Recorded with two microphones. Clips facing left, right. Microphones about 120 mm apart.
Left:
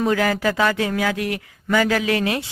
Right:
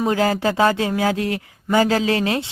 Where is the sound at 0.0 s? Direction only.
25° right (ahead or behind).